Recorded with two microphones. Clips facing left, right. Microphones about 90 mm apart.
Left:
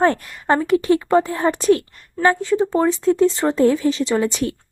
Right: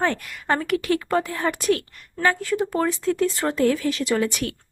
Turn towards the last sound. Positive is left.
turn(degrees=30)  # may be behind; listen again after turning